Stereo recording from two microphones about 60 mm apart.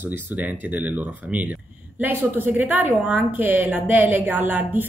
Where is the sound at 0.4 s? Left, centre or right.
Right.